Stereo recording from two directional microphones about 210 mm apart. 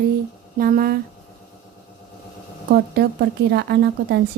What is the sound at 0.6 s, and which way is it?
Speech, 45° right (ahead or behind).